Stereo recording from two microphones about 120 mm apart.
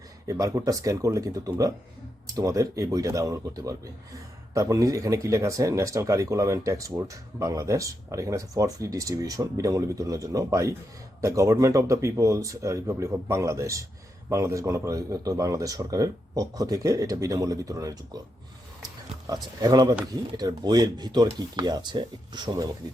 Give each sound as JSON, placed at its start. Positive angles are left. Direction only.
{"t": 0.3, "sound": "speech", "side_deg": -30}
{"t": 19.3, "sound": "speech", "side_deg": -35}